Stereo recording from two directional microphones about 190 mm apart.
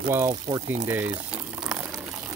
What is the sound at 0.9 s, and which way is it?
Boiling, 10° right (ahead or behind).